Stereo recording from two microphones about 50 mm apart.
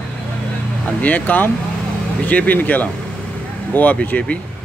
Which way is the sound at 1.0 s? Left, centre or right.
Left.